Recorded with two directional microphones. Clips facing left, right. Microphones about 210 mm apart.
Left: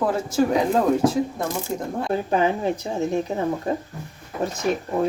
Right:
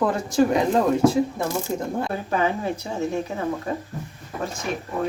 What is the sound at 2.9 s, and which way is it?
Speech, 20° left (ahead or behind).